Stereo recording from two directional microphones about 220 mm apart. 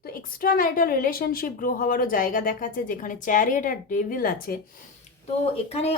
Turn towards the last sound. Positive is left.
turn(degrees=30)  # may be behind; listen again after turning